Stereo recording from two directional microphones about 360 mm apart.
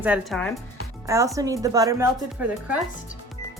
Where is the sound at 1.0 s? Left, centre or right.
Centre.